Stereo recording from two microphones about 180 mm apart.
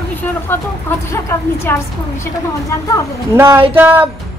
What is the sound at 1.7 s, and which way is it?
Speech, 10° left (ahead or behind).